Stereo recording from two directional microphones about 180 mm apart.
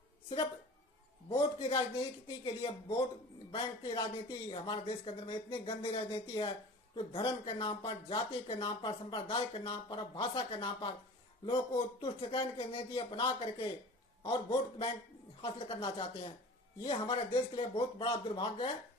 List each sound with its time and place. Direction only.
1.3 s speech: 30° left (ahead or behind)